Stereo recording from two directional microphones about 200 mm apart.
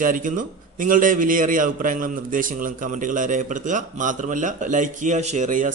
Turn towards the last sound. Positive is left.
turn(degrees=-40)  # may be behind; listen again after turning